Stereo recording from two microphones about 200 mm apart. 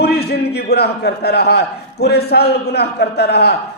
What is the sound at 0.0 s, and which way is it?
A man's voice, 55° left (ahead or behind).